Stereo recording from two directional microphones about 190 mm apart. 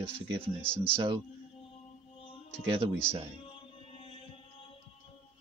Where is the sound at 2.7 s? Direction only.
30° right (ahead or behind).